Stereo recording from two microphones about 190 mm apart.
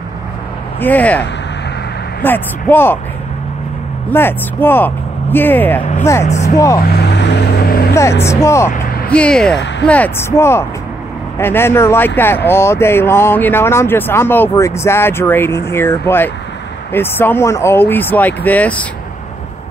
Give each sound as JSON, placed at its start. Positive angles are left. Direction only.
{"t": 0.7, "sound": "speech", "side_deg": 10}
{"t": 2.2, "sound": "speech", "side_deg": 10}
{"t": 4.1, "sound": "speech", "side_deg": 10}
{"t": 6.9, "sound": "vehicle", "side_deg": 60}
{"t": 7.9, "sound": "speech", "side_deg": 15}